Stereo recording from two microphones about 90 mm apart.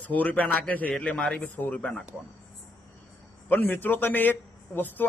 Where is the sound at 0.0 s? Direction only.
15° left (ahead or behind).